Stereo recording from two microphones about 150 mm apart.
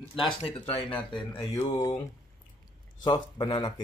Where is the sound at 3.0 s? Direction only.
30° left (ahead or behind).